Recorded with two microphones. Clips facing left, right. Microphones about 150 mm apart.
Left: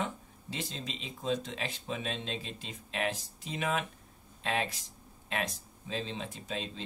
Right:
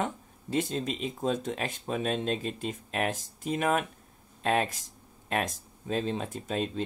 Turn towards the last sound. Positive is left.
turn(degrees=-50)  # may be behind; listen again after turning